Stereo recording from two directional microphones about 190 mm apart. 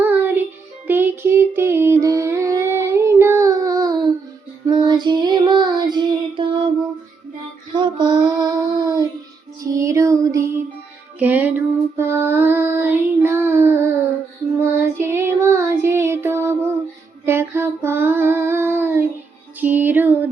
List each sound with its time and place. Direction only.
0.0 s music: 10° right (ahead or behind)
0.9 s a sound: 10° right (ahead or behind)
4.6 s child singing: 20° right (ahead or behind)
7.7 s child singing: 25° right (ahead or behind)
9.6 s music: 15° right (ahead or behind)
11.2 s child singing: 10° right (ahead or behind)
17.2 s a sound: 10° right (ahead or behind)
19.5 s music: 10° right (ahead or behind)